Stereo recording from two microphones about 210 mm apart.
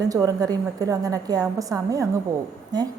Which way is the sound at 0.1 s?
15° right (ahead or behind).